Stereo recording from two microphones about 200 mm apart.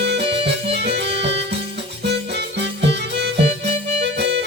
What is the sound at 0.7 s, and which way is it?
Music, 55° right (ahead or behind).